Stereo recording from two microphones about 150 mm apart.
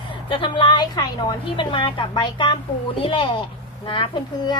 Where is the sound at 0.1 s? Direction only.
35° left (ahead or behind).